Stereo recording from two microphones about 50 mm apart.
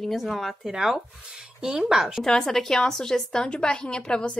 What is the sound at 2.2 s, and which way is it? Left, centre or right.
Speech, centre.